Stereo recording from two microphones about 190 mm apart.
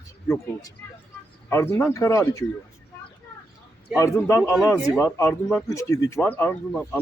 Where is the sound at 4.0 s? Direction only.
15° left (ahead or behind).